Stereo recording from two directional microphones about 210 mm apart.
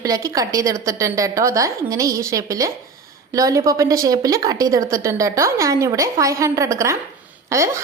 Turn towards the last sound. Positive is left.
turn(degrees=-15)  # may be behind; listen again after turning